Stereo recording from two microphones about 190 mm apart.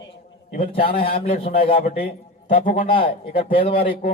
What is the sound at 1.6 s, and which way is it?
Speech, 30° left (ahead or behind).